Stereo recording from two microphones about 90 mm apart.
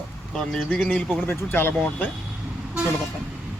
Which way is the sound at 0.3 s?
5° left (ahead or behind).